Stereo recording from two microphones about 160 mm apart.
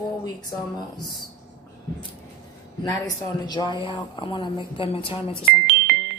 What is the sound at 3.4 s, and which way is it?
A woman's voice, 25° left (ahead or behind).